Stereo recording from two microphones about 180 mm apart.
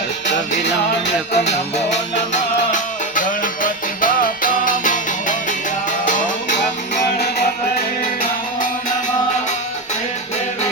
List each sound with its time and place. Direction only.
1.3 s music: 40° left (ahead or behind)
8.2 s music: 50° left (ahead or behind)